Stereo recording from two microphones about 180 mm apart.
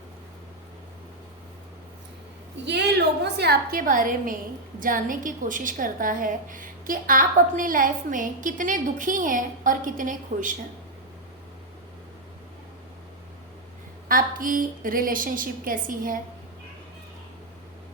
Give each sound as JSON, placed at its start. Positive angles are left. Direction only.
{"t": 2.6, "sound": "a woman's voice", "side_deg": -70}
{"t": 14.1, "sound": "a woman's voice", "side_deg": -50}